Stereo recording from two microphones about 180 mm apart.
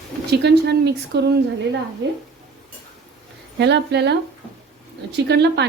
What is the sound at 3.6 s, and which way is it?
A woman's voice, 70° right (ahead or behind).